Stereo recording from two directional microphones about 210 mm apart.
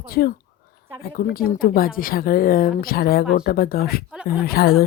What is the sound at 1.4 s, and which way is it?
A woman's voice, 45° left (ahead or behind).